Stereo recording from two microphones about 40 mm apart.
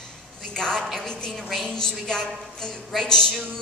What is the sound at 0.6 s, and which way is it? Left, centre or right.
A woman's voice, centre.